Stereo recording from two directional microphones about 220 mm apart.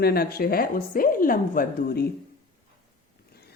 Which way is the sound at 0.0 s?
45° left (ahead or behind).